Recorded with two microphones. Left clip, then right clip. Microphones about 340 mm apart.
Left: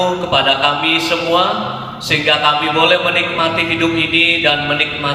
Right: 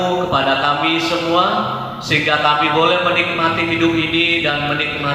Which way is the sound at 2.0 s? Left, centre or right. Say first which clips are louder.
Left 2 dB; left.